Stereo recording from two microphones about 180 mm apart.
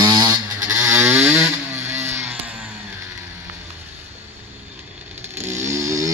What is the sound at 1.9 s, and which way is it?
Music, 40° right (ahead or behind).